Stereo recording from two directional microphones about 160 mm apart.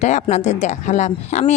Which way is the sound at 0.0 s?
45° left (ahead or behind).